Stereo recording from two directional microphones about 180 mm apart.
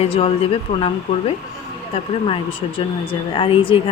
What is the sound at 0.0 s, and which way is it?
Speech, 35° left (ahead or behind).